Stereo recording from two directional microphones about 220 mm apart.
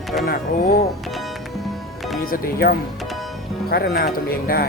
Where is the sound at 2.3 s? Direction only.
45° left (ahead or behind).